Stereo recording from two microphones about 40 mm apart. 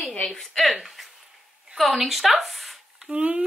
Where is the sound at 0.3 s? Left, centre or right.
Centre.